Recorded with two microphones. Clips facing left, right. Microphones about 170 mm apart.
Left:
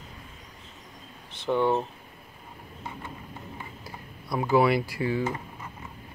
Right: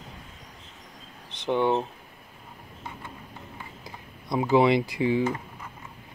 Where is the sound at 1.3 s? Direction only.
20° right (ahead or behind).